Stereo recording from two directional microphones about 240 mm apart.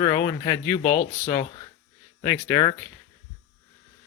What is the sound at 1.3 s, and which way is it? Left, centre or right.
Speech, left.